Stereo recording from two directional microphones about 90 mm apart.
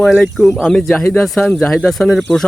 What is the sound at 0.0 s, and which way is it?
Speech, 5° left (ahead or behind).